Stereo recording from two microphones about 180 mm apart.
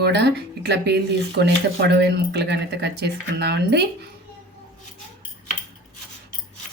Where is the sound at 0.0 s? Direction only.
65° right (ahead or behind).